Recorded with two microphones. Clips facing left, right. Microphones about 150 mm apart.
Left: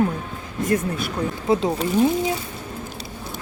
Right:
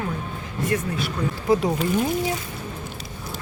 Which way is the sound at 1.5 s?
25° left (ahead or behind).